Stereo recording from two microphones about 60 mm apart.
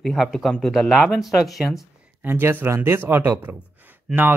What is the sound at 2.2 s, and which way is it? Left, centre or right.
Speech, right.